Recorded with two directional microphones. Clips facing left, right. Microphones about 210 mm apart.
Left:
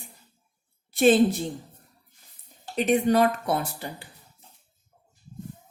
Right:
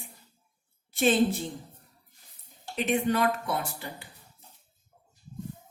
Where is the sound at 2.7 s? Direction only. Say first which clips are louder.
Left 5 dB; 40° left (ahead or behind).